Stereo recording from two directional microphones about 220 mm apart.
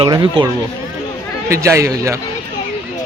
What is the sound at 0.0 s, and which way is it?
Speech, 20° right (ahead or behind).